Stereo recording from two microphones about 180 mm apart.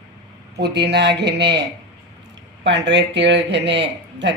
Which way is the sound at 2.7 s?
80° right.